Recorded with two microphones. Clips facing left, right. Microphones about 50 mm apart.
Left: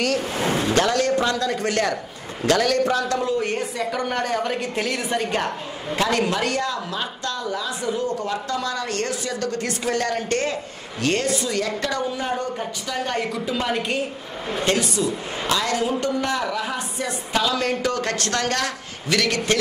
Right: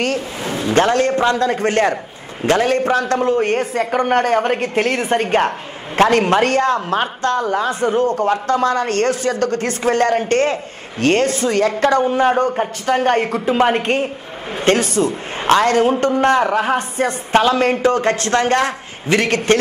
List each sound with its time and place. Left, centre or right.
0.7 s a man's voice: right